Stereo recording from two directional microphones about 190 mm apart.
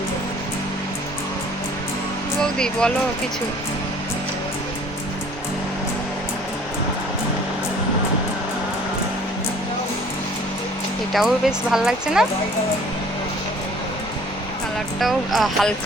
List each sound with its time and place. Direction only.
2.4 s speech: 5° left (ahead or behind)
11.1 s speech: centre (ahead or behind)
14.9 s speech: centre (ahead or behind)